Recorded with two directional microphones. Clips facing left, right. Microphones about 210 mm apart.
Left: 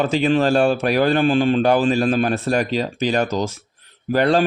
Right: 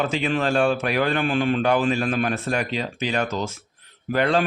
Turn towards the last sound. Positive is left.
turn(degrees=35)  # may be behind; listen again after turning